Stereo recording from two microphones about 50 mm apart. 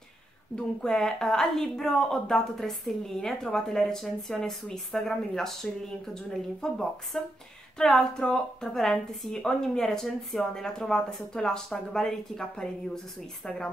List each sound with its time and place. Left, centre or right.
0.8 s a woman's voice: centre